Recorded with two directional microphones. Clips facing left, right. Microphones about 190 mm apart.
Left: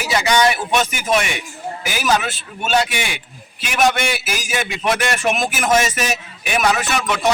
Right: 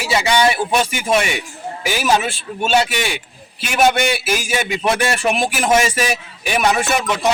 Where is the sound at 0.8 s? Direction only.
30° right (ahead or behind).